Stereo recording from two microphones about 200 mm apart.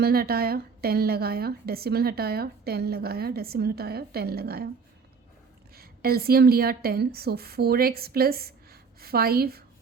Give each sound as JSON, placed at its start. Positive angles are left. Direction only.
{"t": 0.0, "sound": "a woman's voice", "side_deg": -50}
{"t": 5.7, "sound": "a woman's voice", "side_deg": -50}